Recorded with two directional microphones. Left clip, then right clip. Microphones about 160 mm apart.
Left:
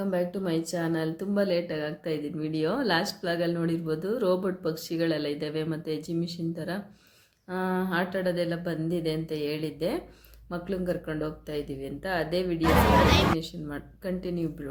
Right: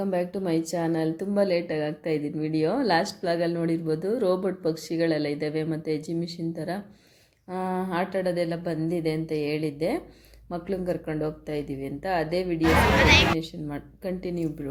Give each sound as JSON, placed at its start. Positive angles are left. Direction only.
{"t": 0.0, "sound": "a woman's voice", "side_deg": -20}